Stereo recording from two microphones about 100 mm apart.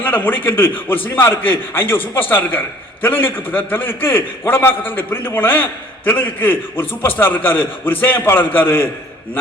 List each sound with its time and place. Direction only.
0.0 s a man's voice: 20° left (ahead or behind)